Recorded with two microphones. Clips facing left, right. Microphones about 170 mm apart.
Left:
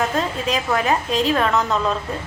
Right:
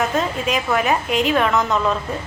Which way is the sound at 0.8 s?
15° right (ahead or behind).